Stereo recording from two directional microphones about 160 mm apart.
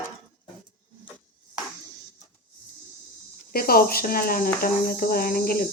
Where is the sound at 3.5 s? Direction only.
65° left (ahead or behind).